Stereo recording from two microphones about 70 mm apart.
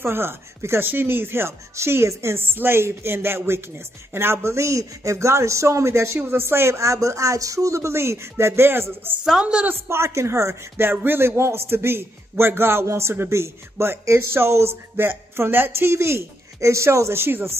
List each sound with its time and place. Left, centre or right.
0.0 s speech: right
9.2 s a woman's voice: centre
9.8 s speech: right